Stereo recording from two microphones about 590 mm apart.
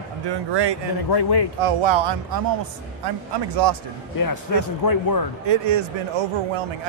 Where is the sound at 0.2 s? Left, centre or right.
Right.